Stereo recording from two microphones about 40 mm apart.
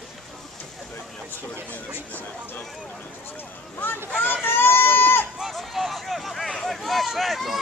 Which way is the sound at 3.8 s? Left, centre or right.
Left.